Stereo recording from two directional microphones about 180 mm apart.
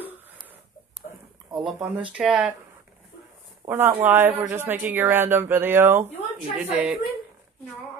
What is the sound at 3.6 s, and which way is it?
A woman's voice, 20° right (ahead or behind).